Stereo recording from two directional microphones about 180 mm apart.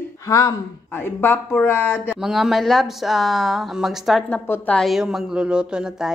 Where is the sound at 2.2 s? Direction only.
Centre (ahead or behind).